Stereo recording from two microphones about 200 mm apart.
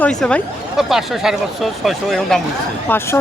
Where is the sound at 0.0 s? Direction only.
5° left (ahead or behind).